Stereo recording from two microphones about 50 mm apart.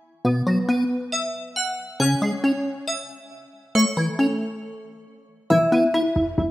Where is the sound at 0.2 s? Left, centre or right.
Centre.